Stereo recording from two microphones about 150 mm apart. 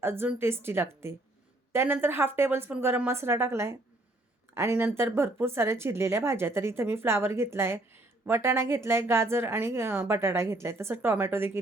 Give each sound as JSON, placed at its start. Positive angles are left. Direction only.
{"t": 0.0, "sound": "speech", "side_deg": -15}